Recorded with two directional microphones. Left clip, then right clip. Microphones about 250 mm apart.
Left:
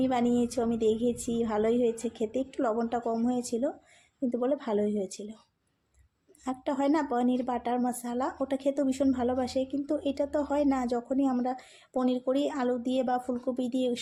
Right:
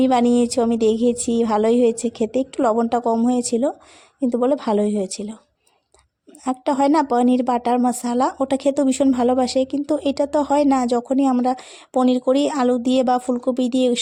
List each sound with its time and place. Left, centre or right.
0.0 s a woman's voice: right
6.4 s a woman's voice: right